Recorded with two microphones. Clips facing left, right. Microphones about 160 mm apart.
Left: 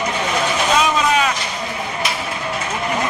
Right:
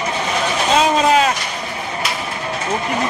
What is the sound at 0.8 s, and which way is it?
Vehicle, 30° right (ahead or behind).